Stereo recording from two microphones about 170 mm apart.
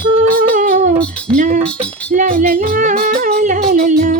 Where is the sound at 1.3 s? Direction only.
50° right (ahead or behind).